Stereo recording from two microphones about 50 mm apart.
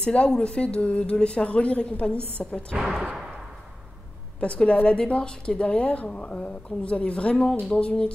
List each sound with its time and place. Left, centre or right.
0.0 s speech: left
2.8 s speech: centre
4.6 s speech: left